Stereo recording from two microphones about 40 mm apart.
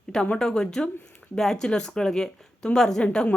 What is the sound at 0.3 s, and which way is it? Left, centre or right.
Speech, centre.